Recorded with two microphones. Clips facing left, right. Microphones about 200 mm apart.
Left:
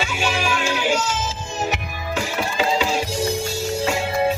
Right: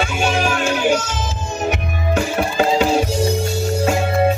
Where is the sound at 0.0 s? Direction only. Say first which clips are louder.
Right 5 dB; 50° right (ahead or behind).